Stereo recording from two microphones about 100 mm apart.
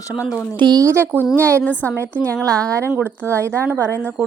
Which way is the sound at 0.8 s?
25° right (ahead or behind).